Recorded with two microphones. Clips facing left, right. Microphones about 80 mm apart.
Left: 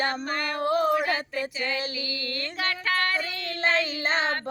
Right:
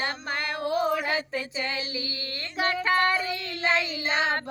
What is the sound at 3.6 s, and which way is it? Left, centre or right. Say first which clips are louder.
Child singing: left 1 dB; left.